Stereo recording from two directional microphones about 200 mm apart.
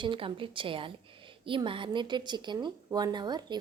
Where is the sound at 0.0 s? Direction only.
25° right (ahead or behind).